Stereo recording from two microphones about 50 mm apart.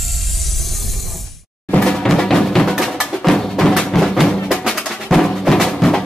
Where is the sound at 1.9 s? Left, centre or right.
Centre.